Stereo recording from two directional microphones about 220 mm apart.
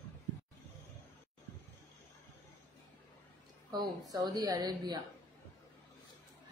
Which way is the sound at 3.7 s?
20° right (ahead or behind).